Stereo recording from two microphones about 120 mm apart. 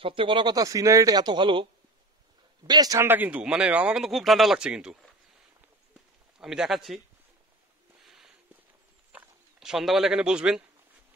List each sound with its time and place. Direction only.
0.0 s speech: 45° right (ahead or behind)
3.0 s speech: 15° right (ahead or behind)
6.3 s speech: 5° right (ahead or behind)
8.1 s a sound: 5° right (ahead or behind)
9.1 s speech: 5° right (ahead or behind)